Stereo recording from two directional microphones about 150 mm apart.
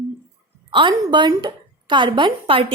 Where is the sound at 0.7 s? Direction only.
30° right (ahead or behind).